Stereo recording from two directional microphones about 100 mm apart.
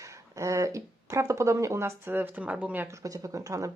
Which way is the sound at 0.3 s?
30° right (ahead or behind).